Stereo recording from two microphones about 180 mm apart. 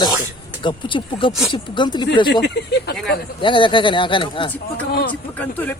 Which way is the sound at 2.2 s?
70° left (ahead or behind).